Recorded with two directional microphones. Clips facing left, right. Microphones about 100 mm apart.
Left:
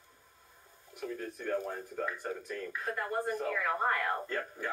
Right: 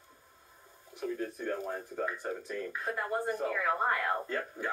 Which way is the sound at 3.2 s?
15° right (ahead or behind).